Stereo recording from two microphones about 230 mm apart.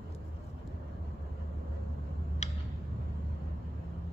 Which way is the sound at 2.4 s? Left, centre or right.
Left.